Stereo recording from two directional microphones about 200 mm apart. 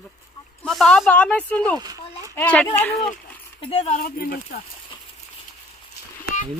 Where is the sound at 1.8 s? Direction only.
20° right (ahead or behind).